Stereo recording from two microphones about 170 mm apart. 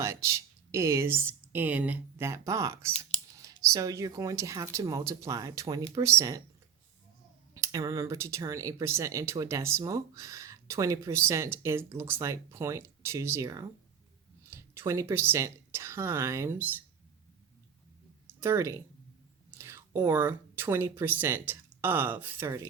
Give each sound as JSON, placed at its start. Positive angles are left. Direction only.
{"t": 0.0, "sound": "speech", "side_deg": -15}
{"t": 7.5, "sound": "speech", "side_deg": -20}
{"t": 18.3, "sound": "speech", "side_deg": -15}